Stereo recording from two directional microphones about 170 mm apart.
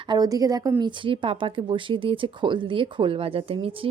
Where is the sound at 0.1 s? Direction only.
20° right (ahead or behind).